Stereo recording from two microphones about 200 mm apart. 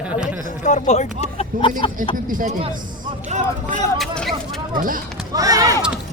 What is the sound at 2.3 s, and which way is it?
Speech, 45° right (ahead or behind).